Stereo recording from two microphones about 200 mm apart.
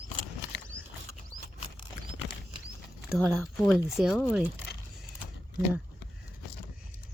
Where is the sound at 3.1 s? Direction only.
5° right (ahead or behind).